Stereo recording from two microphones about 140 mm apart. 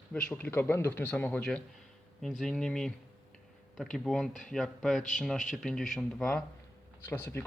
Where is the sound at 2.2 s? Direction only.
Centre (ahead or behind).